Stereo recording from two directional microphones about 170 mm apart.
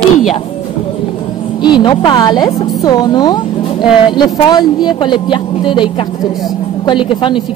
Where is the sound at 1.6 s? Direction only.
25° left (ahead or behind).